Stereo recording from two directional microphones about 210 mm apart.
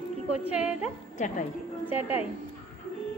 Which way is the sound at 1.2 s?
35° left (ahead or behind).